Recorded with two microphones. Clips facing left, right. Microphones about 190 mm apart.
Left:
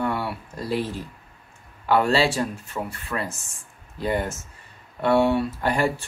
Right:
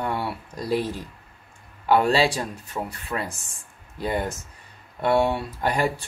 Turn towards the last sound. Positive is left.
turn(degrees=-15)  # may be behind; listen again after turning